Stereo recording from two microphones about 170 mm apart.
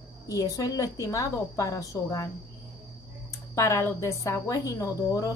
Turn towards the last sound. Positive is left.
turn(degrees=20)  # may be behind; listen again after turning